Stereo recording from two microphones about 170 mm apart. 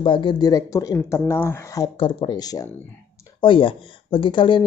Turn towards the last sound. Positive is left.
turn(degrees=30)  # may be behind; listen again after turning